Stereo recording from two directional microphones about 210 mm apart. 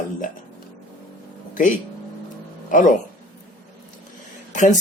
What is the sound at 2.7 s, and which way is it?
Speech, 40° left (ahead or behind).